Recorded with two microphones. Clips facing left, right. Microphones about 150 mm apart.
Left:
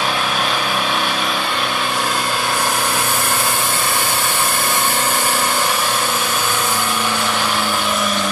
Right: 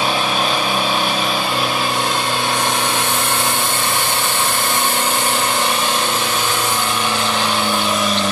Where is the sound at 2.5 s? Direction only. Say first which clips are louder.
Even; 5° left (ahead or behind).